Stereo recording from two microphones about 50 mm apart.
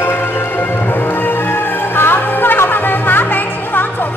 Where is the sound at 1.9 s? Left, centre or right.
Left.